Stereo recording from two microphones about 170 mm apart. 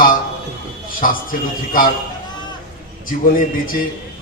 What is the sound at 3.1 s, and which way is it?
Speech, 55° left (ahead or behind).